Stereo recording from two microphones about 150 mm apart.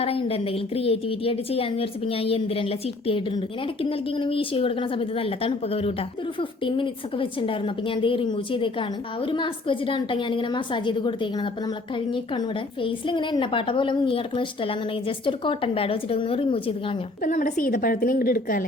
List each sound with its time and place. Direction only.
0.0 s a woman's voice: 40° left (ahead or behind)
17.2 s a woman's voice: 60° left (ahead or behind)